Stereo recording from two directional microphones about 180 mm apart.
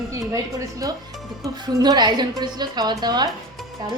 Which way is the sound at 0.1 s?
15° right (ahead or behind).